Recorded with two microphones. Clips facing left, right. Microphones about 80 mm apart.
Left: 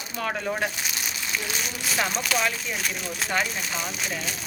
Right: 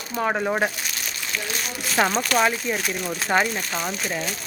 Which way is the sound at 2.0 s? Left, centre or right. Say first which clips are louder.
Right 7 dB; right.